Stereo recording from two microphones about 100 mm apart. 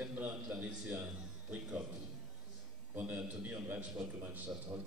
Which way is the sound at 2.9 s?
15° right (ahead or behind).